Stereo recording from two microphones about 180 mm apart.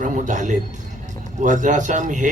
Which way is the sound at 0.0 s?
45° right (ahead or behind).